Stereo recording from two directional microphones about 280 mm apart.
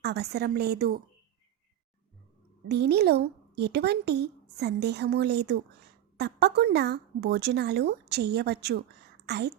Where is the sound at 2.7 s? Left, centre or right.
Right.